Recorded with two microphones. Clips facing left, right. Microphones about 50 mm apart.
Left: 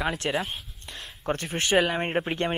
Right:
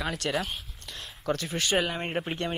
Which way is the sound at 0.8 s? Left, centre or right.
Left.